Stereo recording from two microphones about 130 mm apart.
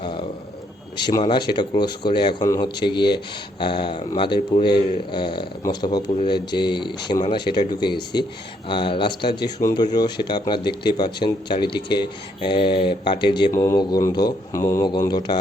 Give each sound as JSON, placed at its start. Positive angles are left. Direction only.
{"t": 0.0, "sound": "a sound", "side_deg": 40}
{"t": 0.9, "sound": "speech", "side_deg": 35}
{"t": 13.5, "sound": "speech", "side_deg": 20}